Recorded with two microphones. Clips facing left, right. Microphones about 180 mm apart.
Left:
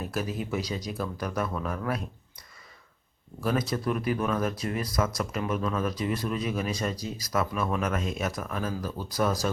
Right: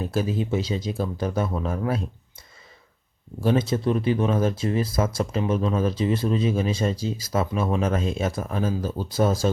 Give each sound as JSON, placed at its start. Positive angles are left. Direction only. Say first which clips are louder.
{"t": 0.0, "sound": "speech", "louder": "right 6 dB", "side_deg": -30}
{"t": 3.4, "sound": "speech", "louder": "right 6 dB", "side_deg": -25}